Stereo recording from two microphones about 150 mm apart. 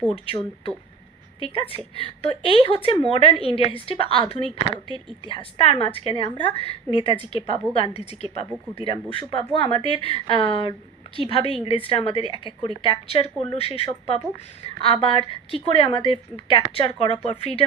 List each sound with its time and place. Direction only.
0.3 s a woman's voice: 40° left (ahead or behind)